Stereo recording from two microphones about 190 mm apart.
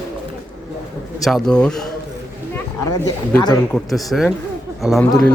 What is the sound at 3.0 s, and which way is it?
Speech, 20° left (ahead or behind).